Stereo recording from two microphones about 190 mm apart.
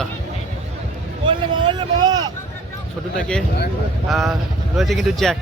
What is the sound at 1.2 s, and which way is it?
Vehicle, 25° right (ahead or behind).